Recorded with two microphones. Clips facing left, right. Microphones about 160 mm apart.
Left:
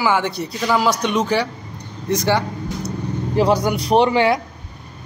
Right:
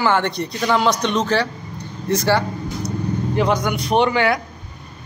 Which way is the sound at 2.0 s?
15° left (ahead or behind).